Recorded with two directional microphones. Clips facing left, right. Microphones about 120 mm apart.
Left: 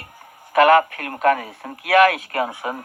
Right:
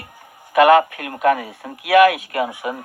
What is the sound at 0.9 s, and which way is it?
Speech, 45° left (ahead or behind).